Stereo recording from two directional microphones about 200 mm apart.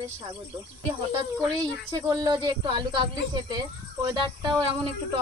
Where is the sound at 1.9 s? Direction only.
20° right (ahead or behind).